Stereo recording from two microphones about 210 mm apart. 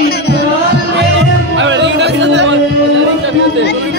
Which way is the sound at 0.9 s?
55° right (ahead or behind).